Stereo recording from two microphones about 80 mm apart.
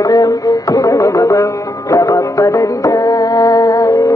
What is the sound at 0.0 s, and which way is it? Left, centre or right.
Music, left.